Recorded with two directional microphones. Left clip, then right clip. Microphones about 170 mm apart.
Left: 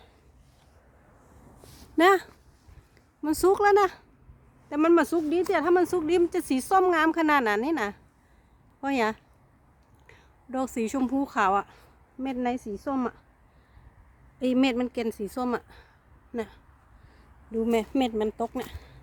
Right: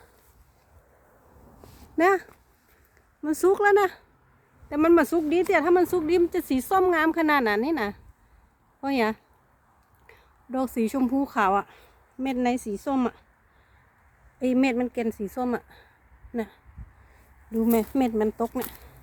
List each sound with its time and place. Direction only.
2.0 s speech: 25° left (ahead or behind)
3.2 s a woman's voice: 5° left (ahead or behind); by 13.2 s 15° right (ahead or behind)
14.3 s speech: 10° left (ahead or behind)